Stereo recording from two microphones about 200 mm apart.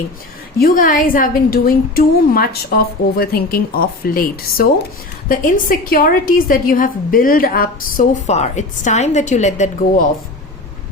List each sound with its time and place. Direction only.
0.6 s a woman's voice: 40° left (ahead or behind)